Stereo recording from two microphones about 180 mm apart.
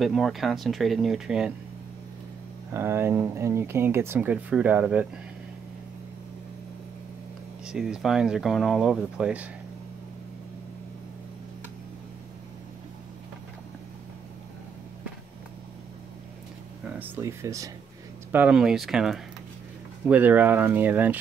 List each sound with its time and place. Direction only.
0.0 s speech: centre (ahead or behind)
2.7 s speech: 15° right (ahead or behind)
7.6 s speech: 5° right (ahead or behind)
17.0 s speech: 15° right (ahead or behind)